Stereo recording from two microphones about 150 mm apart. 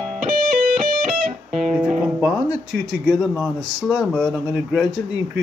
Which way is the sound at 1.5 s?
5° right (ahead or behind).